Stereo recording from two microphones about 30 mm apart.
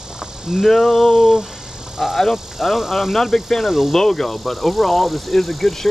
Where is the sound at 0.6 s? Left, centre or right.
Centre.